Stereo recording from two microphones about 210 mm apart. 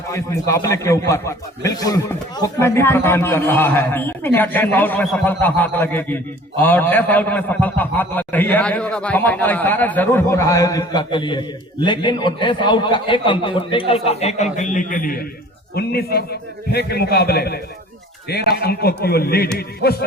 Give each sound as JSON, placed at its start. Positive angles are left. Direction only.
{"t": 0.1, "sound": "a man's voice", "side_deg": 15}